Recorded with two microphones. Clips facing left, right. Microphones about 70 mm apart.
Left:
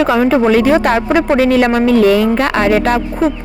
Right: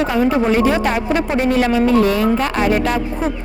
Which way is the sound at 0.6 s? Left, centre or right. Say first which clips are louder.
Left 5 dB; left.